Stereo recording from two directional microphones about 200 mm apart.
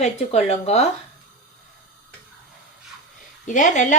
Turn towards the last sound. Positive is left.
turn(degrees=40)  # may be behind; listen again after turning